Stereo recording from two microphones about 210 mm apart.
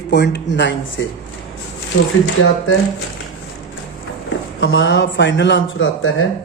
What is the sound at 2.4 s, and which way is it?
Speech, 75° left (ahead or behind).